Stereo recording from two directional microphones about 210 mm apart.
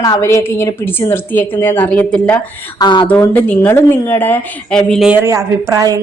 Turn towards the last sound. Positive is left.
turn(degrees=-15)  # may be behind; listen again after turning